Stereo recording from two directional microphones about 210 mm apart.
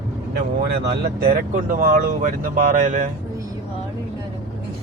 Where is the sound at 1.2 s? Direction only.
40° right (ahead or behind).